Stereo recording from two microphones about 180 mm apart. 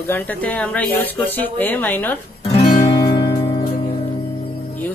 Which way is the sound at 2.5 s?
25° left (ahead or behind).